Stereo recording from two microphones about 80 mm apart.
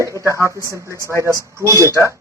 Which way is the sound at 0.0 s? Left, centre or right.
Right.